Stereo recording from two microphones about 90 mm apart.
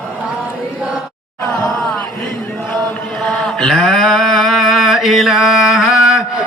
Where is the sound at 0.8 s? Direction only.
10° right (ahead or behind).